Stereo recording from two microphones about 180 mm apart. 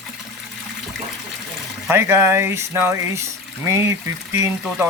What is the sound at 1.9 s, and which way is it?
Speech, 15° right (ahead or behind).